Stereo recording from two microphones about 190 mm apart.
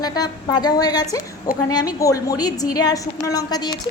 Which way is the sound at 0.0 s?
20° left (ahead or behind).